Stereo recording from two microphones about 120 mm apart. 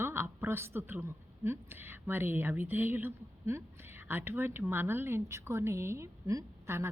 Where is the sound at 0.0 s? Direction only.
20° right (ahead or behind).